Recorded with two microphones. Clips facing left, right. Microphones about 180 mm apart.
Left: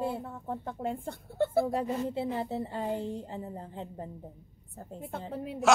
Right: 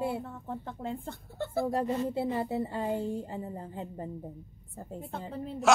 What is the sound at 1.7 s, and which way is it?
A woman's voice, 5° right (ahead or behind).